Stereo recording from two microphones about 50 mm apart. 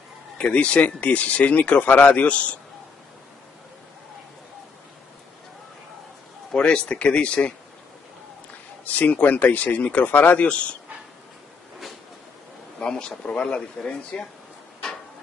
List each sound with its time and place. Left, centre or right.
0.4 s speech: left
6.5 s speech: centre
8.8 s speech: left
12.8 s speech: centre